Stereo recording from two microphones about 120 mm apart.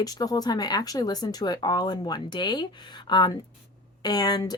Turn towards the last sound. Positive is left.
turn(degrees=35)  # may be behind; listen again after turning